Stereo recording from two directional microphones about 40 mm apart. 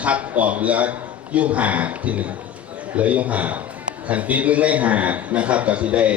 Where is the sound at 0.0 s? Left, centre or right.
Right.